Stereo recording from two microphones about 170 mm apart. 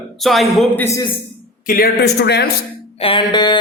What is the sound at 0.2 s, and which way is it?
Speech, centre (ahead or behind).